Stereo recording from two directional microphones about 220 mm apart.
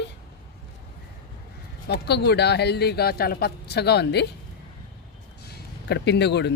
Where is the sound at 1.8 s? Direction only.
50° left (ahead or behind).